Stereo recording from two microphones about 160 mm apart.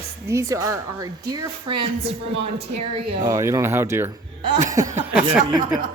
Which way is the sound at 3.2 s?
20° right (ahead or behind).